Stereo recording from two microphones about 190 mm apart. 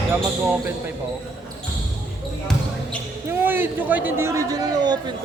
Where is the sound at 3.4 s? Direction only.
10° right (ahead or behind).